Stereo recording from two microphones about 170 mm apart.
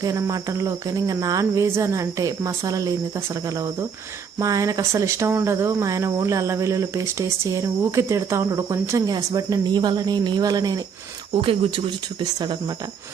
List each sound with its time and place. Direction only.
0.0 s speech: 20° right (ahead or behind)
4.4 s speech: 20° right (ahead or behind)
11.3 s speech: 35° right (ahead or behind)